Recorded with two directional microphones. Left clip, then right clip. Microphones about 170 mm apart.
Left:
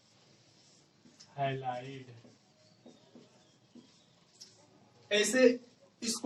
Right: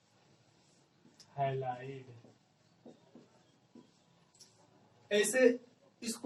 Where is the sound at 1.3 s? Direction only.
20° left (ahead or behind).